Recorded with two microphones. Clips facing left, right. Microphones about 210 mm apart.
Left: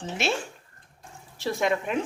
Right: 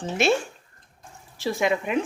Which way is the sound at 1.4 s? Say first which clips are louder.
Right 2 dB; 5° right (ahead or behind).